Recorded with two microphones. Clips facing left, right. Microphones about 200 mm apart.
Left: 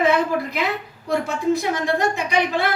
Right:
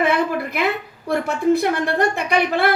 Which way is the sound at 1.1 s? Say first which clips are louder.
Right 3 dB; 55° right (ahead or behind).